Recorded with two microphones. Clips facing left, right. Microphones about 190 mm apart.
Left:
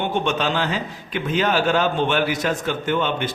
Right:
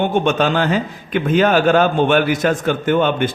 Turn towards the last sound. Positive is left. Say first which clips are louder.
# right 6 dB
turn(degrees=-50)  # may be behind; listen again after turning